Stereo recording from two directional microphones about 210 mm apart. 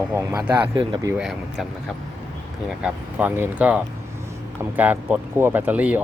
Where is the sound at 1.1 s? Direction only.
5° right (ahead or behind).